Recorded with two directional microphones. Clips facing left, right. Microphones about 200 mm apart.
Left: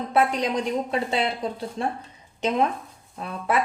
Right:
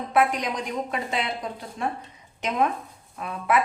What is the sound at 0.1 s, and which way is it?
A woman's voice, 30° left (ahead or behind).